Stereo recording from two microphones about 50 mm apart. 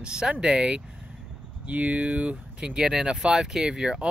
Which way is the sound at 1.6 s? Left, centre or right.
Right.